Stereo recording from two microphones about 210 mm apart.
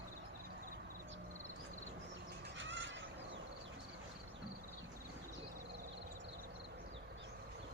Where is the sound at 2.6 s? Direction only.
60° right (ahead or behind).